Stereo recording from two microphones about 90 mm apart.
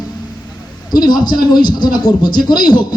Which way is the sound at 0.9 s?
50° left (ahead or behind).